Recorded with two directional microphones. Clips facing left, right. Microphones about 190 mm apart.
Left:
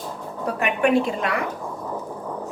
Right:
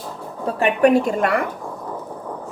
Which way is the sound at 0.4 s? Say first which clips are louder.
Right 5 dB; 35° right (ahead or behind).